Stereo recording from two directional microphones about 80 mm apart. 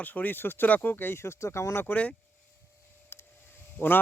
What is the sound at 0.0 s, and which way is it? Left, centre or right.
A man's voice, left.